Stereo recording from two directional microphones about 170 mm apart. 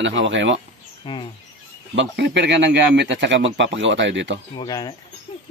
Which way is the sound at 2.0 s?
85° right.